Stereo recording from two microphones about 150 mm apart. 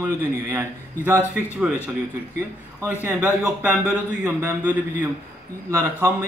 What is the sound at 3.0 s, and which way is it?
Speech, 10° right (ahead or behind).